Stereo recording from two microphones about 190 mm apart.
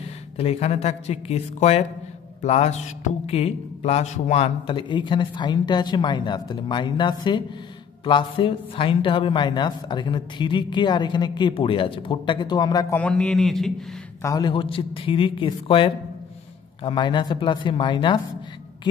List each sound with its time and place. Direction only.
0.0 s a man's voice: 35° left (ahead or behind)
12.9 s a man's voice: 5° left (ahead or behind)
14.2 s a man's voice: 20° left (ahead or behind)